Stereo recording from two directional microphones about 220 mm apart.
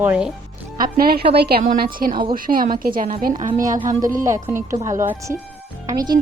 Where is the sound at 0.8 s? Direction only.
40° right (ahead or behind).